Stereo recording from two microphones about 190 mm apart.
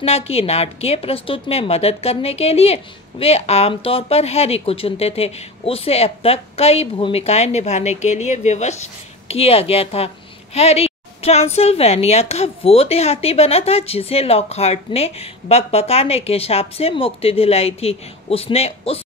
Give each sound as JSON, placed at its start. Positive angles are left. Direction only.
{"t": 0.0, "sound": "a woman's voice", "side_deg": 35}